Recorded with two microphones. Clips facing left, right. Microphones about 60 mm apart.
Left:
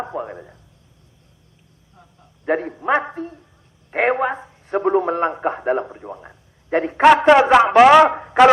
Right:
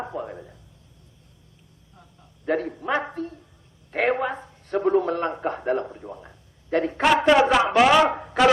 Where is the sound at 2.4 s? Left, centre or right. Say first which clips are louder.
Left 5 dB; left.